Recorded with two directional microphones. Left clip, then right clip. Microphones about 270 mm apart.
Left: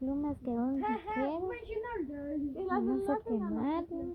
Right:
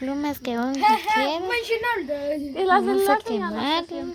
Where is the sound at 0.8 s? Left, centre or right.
Right.